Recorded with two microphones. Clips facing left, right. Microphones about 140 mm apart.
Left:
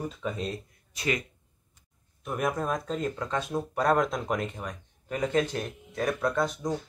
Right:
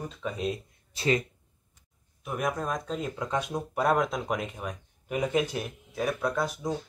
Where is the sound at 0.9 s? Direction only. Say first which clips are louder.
Right 4 dB; 30° right (ahead or behind).